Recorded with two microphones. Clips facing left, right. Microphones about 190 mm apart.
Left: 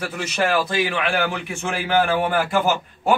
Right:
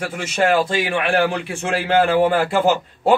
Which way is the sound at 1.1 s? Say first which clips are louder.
Right 4 dB; 30° right (ahead or behind).